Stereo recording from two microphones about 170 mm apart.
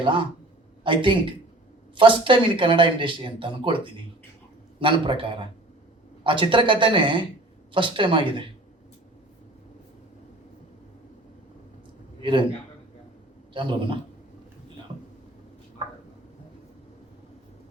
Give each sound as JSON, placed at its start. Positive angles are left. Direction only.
{"t": 0.0, "sound": "speech", "side_deg": -30}
{"t": 12.2, "sound": "a man's voice", "side_deg": -30}
{"t": 13.5, "sound": "speech", "side_deg": -30}